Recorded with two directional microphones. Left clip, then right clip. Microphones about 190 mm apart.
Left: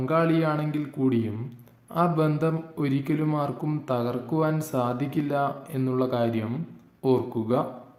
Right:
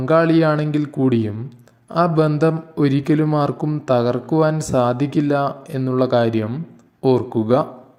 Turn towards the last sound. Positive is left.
turn(degrees=-30)  # may be behind; listen again after turning